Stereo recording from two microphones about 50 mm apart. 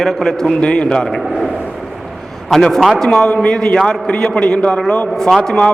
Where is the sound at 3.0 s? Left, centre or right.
Centre.